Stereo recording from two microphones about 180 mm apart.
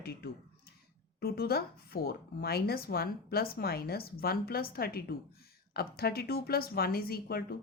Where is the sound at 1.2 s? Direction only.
60° left (ahead or behind).